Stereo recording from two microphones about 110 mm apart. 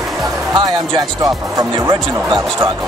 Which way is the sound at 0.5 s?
40° right (ahead or behind).